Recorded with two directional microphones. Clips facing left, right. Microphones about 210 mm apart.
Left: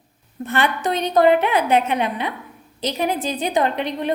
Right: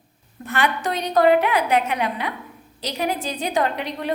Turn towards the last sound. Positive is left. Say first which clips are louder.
# left 3 dB
turn(degrees=20)  # may be behind; listen again after turning